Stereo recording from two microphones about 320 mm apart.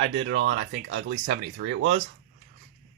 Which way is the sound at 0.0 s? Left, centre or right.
Right.